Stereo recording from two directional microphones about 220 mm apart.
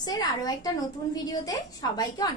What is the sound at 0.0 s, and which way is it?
A woman's voice, 15° left (ahead or behind).